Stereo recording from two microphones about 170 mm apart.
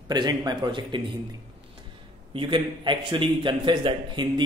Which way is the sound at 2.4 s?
30° right (ahead or behind).